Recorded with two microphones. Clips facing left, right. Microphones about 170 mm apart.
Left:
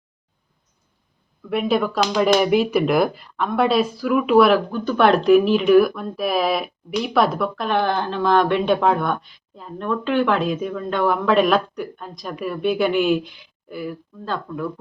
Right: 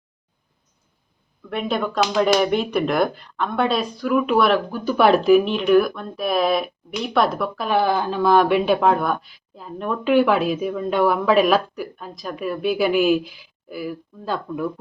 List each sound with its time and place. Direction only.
1.5 s speech: 5° left (ahead or behind); by 14.7 s 10° right (ahead or behind)